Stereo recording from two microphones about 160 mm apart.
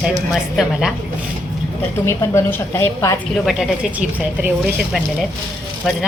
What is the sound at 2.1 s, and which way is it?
A woman's voice, 20° left (ahead or behind).